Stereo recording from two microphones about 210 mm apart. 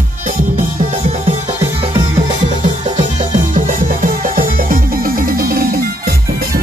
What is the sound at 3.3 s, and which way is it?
Music, 40° right (ahead or behind).